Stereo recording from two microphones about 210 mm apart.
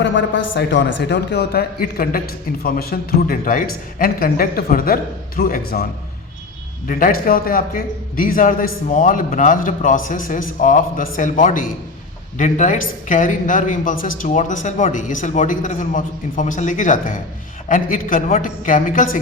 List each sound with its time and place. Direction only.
0.0 s a man's voice: 60° left (ahead or behind); by 5.8 s 45° left (ahead or behind)
6.8 s a man's voice: 40° left (ahead or behind)